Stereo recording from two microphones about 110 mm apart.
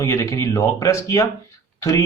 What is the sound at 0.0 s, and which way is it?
Speech, 25° left (ahead or behind).